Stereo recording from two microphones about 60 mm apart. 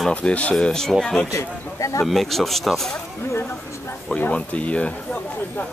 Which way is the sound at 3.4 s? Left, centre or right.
Left.